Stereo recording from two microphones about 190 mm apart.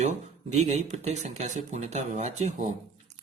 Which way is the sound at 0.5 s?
35° right (ahead or behind).